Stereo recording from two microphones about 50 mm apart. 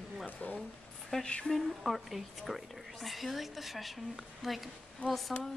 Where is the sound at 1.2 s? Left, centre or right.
Left.